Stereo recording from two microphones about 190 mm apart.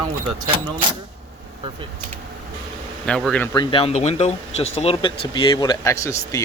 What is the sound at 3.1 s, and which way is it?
Speech, centre (ahead or behind).